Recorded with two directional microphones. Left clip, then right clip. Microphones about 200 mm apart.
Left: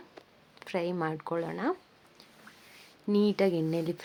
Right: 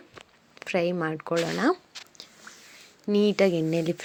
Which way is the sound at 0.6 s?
20° right (ahead or behind).